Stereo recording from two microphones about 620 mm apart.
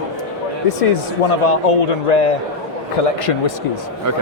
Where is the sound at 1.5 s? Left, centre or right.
Left.